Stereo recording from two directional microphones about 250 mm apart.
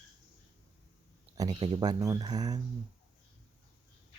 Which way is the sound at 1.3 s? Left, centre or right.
Centre.